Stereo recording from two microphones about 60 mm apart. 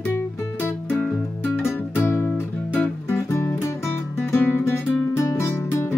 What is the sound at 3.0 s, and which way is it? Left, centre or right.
Music, left.